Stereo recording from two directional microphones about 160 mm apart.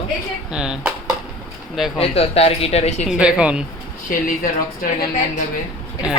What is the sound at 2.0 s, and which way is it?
Speech, 40° left (ahead or behind).